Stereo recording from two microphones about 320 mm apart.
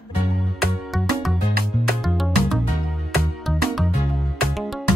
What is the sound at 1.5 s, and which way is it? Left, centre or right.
Music, right.